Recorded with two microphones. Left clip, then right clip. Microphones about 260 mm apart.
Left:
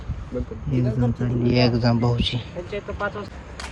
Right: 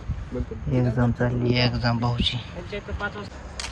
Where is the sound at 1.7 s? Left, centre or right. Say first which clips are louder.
Left 4 dB; centre.